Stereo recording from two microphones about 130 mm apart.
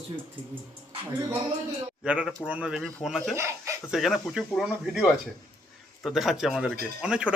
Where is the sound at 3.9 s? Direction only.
Centre (ahead or behind).